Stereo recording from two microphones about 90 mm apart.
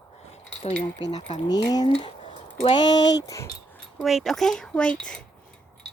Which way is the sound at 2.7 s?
50° left (ahead or behind).